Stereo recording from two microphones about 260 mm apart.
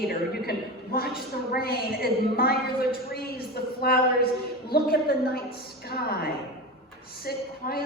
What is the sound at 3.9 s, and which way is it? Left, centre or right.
A woman's voice, left.